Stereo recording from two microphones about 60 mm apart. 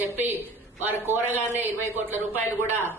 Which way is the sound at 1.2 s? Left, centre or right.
Right.